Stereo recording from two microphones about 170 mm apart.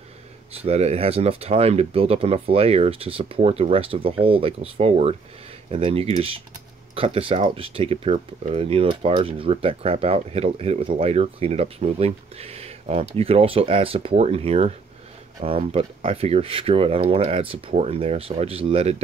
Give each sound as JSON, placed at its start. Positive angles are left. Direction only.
{"t": 0.5, "sound": "speech", "side_deg": -35}